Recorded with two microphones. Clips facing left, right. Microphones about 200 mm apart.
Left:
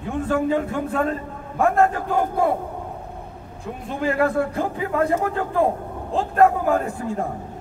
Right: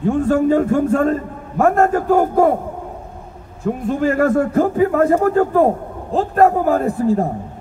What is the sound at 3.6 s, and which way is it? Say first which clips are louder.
A man's voice: right 7 dB; 45° right (ahead or behind).